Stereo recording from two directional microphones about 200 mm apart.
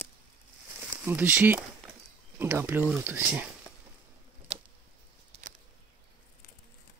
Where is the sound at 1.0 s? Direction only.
10° right (ahead or behind).